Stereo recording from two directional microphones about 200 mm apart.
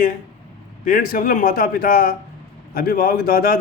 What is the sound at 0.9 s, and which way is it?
Speech, 45° left (ahead or behind).